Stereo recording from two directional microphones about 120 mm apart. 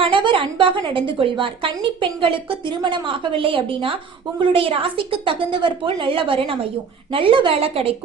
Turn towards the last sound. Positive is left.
turn(degrees=-50)  # may be behind; listen again after turning